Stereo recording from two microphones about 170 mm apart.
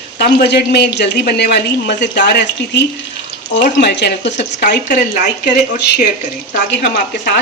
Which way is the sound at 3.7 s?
80° left.